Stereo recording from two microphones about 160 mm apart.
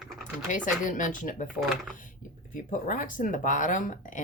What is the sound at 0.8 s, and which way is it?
Speech, 55° left (ahead or behind).